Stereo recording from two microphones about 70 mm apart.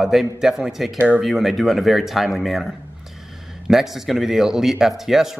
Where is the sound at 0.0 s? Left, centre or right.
Centre.